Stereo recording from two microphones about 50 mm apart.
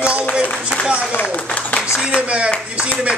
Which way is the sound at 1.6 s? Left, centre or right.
Left.